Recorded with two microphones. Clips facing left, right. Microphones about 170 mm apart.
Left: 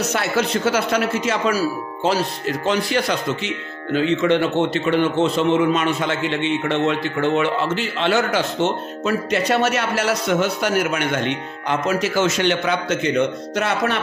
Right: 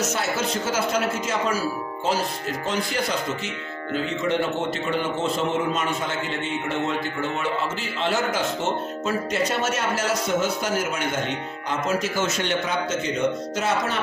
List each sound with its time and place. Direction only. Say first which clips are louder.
0.1 s speech: left 5 dB; 70° left (ahead or behind)